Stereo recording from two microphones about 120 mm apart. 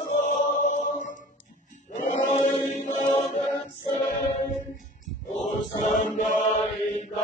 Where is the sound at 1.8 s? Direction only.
85° left.